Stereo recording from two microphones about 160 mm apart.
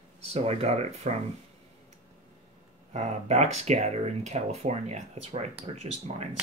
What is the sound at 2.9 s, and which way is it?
Speech, 45° right (ahead or behind).